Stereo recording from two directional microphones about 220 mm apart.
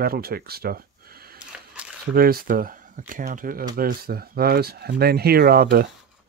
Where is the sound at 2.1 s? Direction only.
40° right (ahead or behind).